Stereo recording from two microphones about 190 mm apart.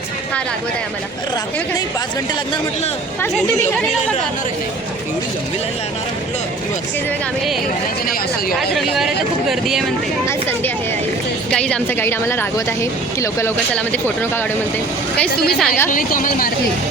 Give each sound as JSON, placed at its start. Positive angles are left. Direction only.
{"t": 9.5, "sound": "speech", "side_deg": 0}
{"t": 11.5, "sound": "a woman's voice", "side_deg": 5}
{"t": 15.5, "sound": "speech", "side_deg": 5}
{"t": 15.9, "sound": "speech", "side_deg": 45}